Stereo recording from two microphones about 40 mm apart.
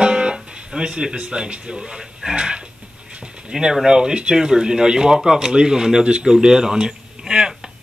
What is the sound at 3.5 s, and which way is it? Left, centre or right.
Speech, centre.